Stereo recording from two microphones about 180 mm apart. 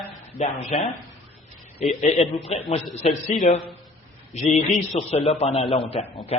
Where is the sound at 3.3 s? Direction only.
45° left (ahead or behind).